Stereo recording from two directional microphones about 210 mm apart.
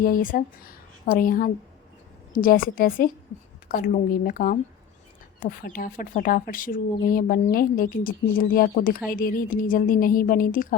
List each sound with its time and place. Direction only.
0.0 s a woman's voice: 40° left (ahead or behind)